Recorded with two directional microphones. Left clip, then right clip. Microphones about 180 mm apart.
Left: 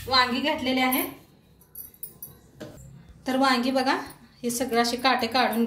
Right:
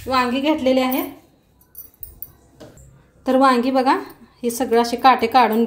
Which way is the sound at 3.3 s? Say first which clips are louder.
Right 8 dB; 50° right (ahead or behind).